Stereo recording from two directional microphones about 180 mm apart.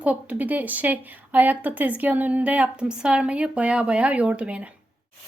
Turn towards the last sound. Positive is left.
turn(degrees=-5)  # may be behind; listen again after turning